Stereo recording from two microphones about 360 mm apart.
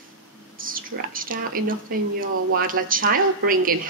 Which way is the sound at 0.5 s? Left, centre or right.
Right.